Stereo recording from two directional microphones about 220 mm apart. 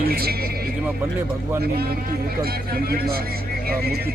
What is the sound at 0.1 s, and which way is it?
Speech, 45° right (ahead or behind).